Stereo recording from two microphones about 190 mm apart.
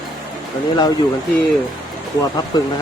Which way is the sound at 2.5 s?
20° left (ahead or behind).